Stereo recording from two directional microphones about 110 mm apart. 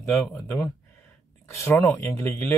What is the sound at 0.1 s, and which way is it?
Speech, 15° left (ahead or behind).